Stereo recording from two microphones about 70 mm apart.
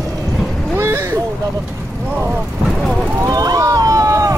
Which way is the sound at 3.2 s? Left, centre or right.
Right.